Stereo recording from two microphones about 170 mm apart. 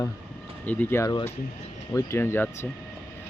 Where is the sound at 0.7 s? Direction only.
10° left (ahead or behind).